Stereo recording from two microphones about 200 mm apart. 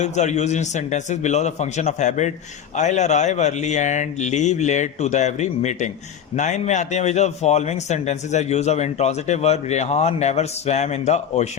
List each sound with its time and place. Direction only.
0.0 s a man's voice: 35° left (ahead or behind)